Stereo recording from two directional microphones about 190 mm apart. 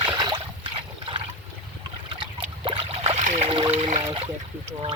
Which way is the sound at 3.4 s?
25° right (ahead or behind).